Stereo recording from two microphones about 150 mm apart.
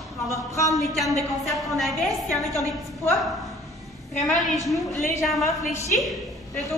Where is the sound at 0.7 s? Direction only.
Centre (ahead or behind).